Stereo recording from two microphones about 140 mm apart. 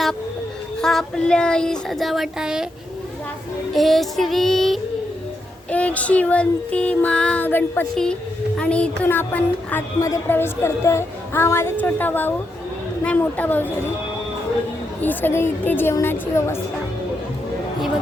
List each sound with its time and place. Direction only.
0.8 s child singing: 5° left (ahead or behind)
3.7 s child singing: centre (ahead or behind)
15.0 s child singing: 15° left (ahead or behind)